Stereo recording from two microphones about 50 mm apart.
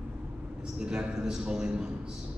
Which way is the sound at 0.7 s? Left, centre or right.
Centre.